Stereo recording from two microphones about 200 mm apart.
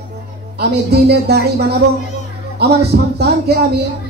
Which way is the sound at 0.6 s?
55° right (ahead or behind).